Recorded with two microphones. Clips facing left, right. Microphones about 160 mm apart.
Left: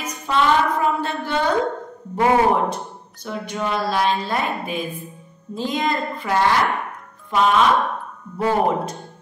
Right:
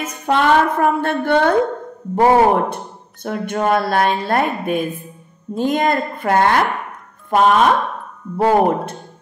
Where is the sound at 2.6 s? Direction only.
55° right (ahead or behind).